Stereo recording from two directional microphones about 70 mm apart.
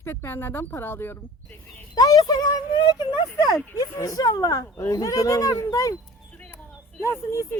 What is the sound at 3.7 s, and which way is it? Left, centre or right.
Speech, left.